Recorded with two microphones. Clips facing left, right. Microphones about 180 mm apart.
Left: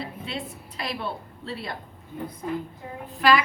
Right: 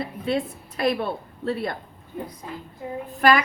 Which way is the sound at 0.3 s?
50° right (ahead or behind).